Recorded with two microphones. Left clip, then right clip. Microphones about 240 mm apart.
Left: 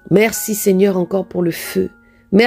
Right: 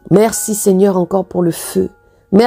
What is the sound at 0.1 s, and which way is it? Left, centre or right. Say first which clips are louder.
A woman's voice: right 2 dB; centre.